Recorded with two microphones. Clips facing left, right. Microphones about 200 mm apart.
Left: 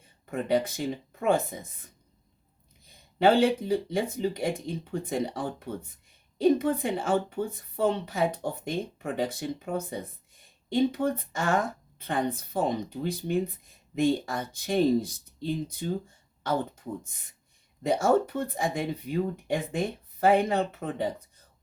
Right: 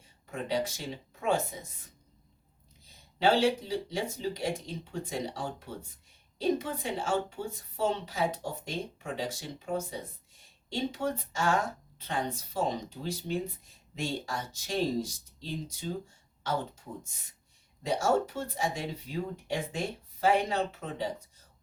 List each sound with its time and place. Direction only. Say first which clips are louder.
0.3 s a woman's voice: left 5 dB; 55° left (ahead or behind)
2.8 s a woman's voice: left 5 dB; 55° left (ahead or behind)